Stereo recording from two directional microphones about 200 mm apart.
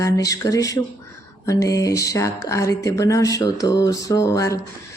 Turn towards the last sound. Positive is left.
turn(degrees=15)  # may be behind; listen again after turning